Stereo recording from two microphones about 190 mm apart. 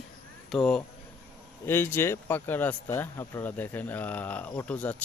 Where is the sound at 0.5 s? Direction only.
Centre (ahead or behind).